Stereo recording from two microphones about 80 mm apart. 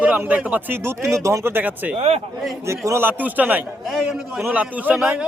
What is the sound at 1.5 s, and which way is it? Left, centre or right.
Speech, centre.